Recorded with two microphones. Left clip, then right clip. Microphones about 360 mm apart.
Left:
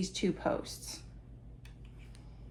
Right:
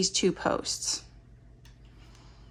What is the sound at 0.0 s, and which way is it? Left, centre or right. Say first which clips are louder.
Speech: right 7 dB; right.